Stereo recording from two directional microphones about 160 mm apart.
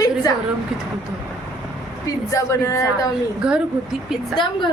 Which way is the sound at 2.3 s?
20° left (ahead or behind).